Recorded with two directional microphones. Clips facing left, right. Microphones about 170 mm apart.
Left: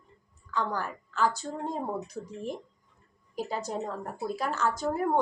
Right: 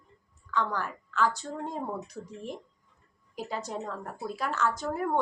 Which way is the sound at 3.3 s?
40° left (ahead or behind).